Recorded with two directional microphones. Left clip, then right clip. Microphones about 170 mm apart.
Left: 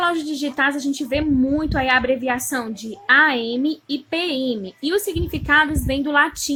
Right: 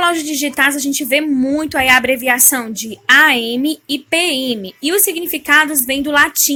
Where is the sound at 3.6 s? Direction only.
55° right (ahead or behind).